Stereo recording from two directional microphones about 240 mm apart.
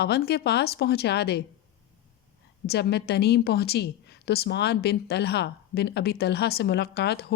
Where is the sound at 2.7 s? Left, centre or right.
Left.